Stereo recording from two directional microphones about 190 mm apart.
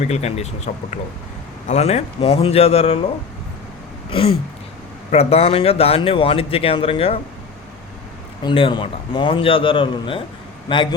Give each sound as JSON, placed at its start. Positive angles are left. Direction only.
{"t": 0.0, "sound": "speech", "side_deg": 35}
{"t": 4.1, "sound": "speech", "side_deg": 30}
{"t": 8.4, "sound": "a man's voice", "side_deg": 25}